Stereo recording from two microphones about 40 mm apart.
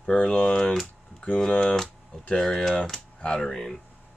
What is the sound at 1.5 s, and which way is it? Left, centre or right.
Speech, left.